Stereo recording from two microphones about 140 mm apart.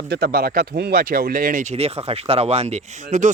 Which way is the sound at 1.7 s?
45° right (ahead or behind).